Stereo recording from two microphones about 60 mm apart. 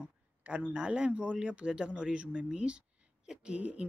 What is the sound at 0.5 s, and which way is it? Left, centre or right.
Speech, centre.